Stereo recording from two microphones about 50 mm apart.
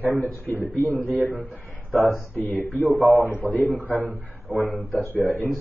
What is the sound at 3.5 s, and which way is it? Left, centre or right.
Speech, left.